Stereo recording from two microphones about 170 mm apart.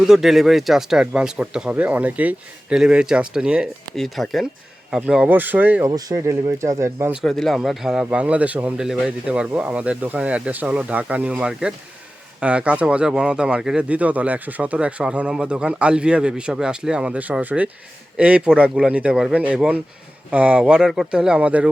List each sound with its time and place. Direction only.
0.1 s speech: centre (ahead or behind)
5.9 s speech: 20° right (ahead or behind)
7.1 s speech: centre (ahead or behind)